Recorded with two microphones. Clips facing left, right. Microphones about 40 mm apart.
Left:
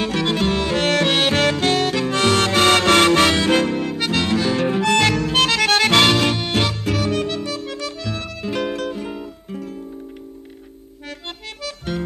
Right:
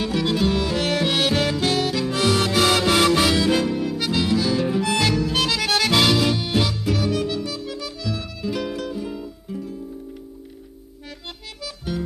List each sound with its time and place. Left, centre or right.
0.0 s music: left
1.4 s harmonica: left
4.1 s music: left
4.4 s music: left
8.0 s music: left
11.2 s accordion: left